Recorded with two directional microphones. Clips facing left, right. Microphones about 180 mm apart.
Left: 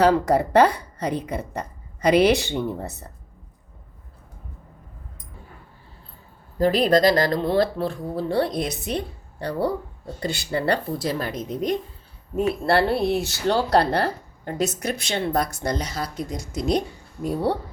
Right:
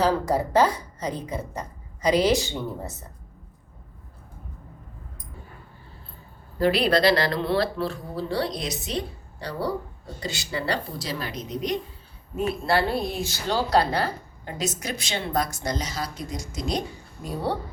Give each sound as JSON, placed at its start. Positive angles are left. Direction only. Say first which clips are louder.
{"t": 0.0, "sound": "speech", "louder": "left 5 dB", "side_deg": 65}
{"t": 6.6, "sound": "speech", "louder": "left 3 dB", "side_deg": 45}